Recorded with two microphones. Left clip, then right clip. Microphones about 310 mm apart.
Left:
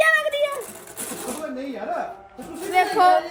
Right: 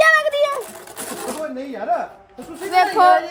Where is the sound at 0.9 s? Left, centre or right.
Right.